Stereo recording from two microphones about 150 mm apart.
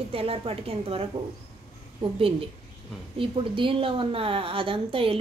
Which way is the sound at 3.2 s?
35° right (ahead or behind).